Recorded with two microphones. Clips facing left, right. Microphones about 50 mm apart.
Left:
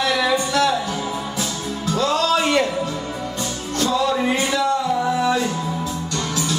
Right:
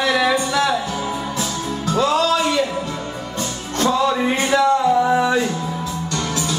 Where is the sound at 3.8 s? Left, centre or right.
Right.